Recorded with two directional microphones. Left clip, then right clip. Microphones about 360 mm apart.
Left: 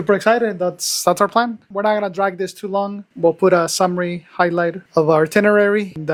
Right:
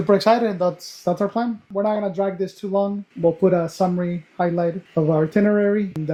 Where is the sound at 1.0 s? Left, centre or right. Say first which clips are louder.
Left 6 dB; left.